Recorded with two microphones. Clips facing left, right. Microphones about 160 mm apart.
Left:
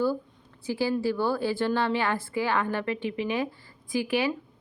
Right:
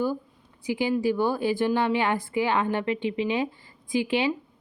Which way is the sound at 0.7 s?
15° right (ahead or behind).